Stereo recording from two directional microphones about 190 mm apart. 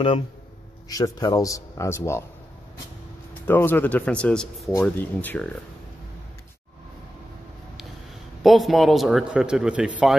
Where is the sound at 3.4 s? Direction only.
10° left (ahead or behind).